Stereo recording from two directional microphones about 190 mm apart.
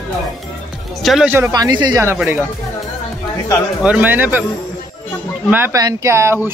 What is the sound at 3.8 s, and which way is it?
Speech, 5° right (ahead or behind).